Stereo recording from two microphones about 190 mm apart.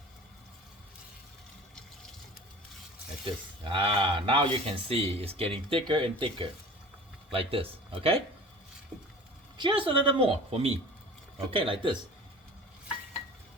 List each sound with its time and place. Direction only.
3.2 s speech: 25° right (ahead or behind)
9.6 s speech: 25° right (ahead or behind)